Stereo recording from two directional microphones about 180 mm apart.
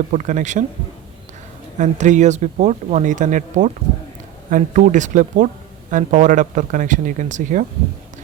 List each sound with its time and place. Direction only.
0.1 s speech: 45° right (ahead or behind)
1.8 s speech: 40° right (ahead or behind)